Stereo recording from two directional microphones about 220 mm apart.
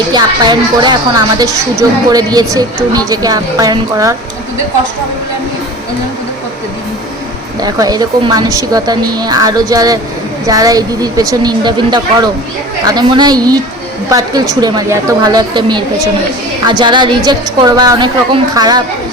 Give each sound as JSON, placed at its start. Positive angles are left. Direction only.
{"t": 0.1, "sound": "a woman's voice", "side_deg": -20}
{"t": 7.6, "sound": "a woman's voice", "side_deg": -15}